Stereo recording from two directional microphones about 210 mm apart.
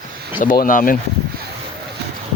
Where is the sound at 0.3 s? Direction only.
40° left (ahead or behind).